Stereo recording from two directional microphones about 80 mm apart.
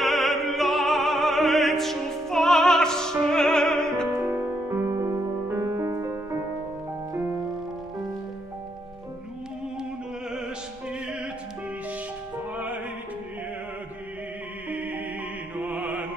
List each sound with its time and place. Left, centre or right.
0.0 s opera: centre
4.2 s music: right
4.8 s music: right
14.7 s music: right